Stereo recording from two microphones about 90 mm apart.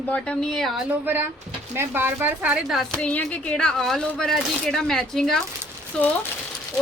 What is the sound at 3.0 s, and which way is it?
Speech, 15° left (ahead or behind).